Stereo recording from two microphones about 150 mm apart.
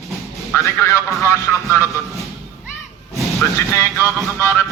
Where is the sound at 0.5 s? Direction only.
20° left (ahead or behind).